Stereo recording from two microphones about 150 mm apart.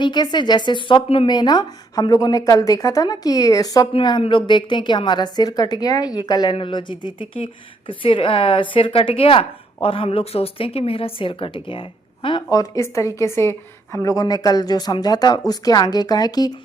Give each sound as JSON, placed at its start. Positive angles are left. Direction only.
{"t": 0.0, "sound": "a woman's voice", "side_deg": 30}